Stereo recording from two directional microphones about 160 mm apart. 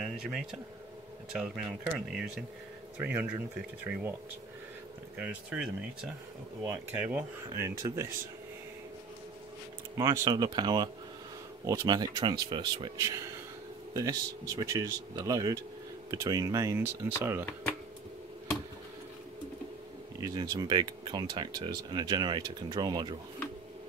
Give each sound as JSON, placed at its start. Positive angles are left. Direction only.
{"t": 0.0, "sound": "speech", "side_deg": -5}
{"t": 5.1, "sound": "speech", "side_deg": -10}
{"t": 9.9, "sound": "speech", "side_deg": -20}
{"t": 20.2, "sound": "speech", "side_deg": -20}